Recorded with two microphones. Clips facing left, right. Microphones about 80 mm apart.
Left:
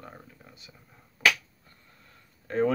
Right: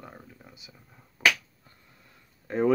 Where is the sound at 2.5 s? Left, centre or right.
Centre.